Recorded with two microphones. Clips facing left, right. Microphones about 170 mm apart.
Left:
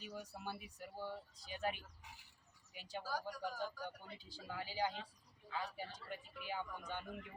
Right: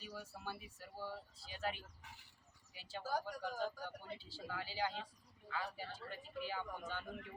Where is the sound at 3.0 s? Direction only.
45° right (ahead or behind).